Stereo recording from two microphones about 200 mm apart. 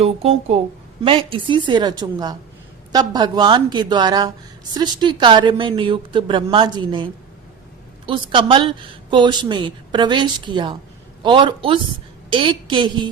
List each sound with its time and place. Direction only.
0.0 s a woman's voice: 30° right (ahead or behind)